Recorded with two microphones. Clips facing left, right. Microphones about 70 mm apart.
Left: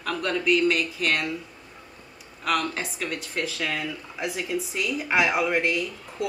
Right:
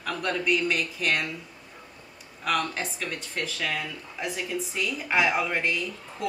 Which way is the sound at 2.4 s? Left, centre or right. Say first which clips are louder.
Left 1 dB; centre.